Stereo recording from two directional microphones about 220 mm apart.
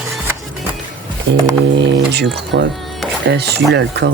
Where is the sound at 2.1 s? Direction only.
50° right (ahead or behind).